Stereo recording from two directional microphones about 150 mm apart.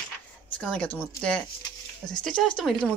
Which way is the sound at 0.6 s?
10° left (ahead or behind).